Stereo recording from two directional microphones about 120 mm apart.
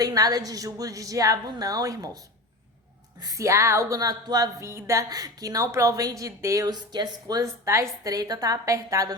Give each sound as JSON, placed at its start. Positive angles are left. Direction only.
{"t": 0.0, "sound": "a woman's voice", "side_deg": -30}
{"t": 3.2, "sound": "speech", "side_deg": -30}